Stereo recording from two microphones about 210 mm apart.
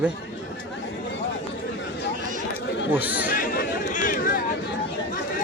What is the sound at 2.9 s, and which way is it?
Speech, 10° right (ahead or behind).